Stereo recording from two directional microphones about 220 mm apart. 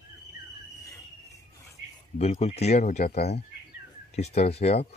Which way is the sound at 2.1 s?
30° left (ahead or behind).